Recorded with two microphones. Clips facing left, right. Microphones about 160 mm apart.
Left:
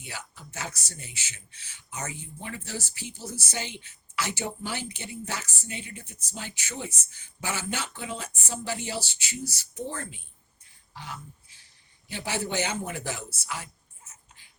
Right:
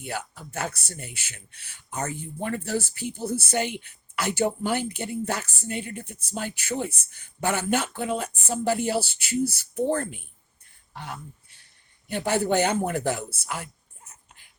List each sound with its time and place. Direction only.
0.0 s speech: 55° right (ahead or behind)
10.9 s a sound: 60° right (ahead or behind)
12.0 s speech: 55° right (ahead or behind)